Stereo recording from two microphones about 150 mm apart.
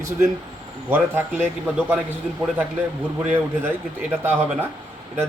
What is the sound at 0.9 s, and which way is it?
Speech, 10° right (ahead or behind).